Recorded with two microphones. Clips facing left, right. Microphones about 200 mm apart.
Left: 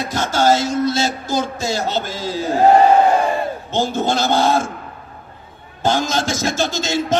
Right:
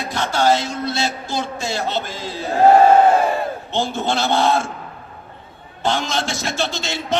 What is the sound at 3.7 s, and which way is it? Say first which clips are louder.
Speech: left 4 dB; 40° left (ahead or behind).